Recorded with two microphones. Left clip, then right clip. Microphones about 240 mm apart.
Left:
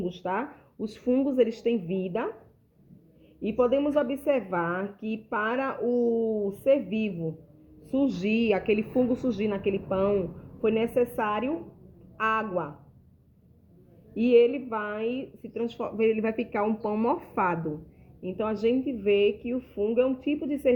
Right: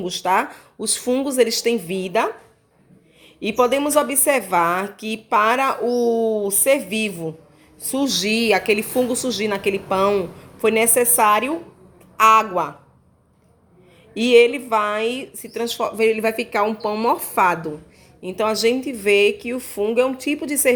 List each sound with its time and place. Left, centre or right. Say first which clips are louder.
0.0 s speech: right 11 dB; right
3.4 s speech: right 6 dB; right
14.1 s speech: right 7 dB; right
18.2 s speech: right 9 dB; right
19.1 s speech: right 8 dB; right
19.5 s speech: right 6 dB; right